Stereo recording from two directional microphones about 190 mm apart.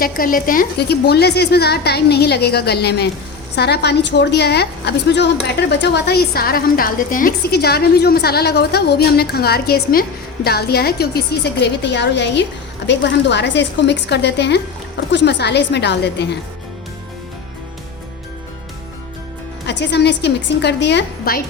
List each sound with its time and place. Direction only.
0.0 s a woman's voice: 50° left (ahead or behind); by 16.2 s 65° left (ahead or behind)
19.6 s a woman's voice: 65° left (ahead or behind)